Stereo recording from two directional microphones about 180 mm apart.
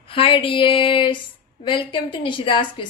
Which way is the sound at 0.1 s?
30° left (ahead or behind).